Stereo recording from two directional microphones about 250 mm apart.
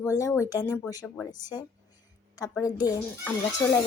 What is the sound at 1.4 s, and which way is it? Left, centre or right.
A woman's voice, centre.